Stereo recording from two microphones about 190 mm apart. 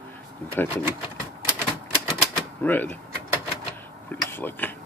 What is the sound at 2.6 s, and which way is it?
Speech, 10° left (ahead or behind).